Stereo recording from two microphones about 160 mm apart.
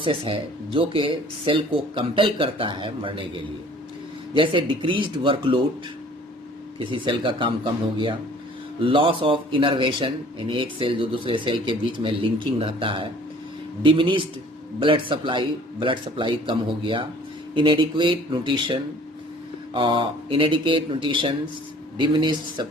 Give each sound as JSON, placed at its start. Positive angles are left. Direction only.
{"t": 0.0, "sound": "speech", "side_deg": -35}
{"t": 6.7, "sound": "speech", "side_deg": -30}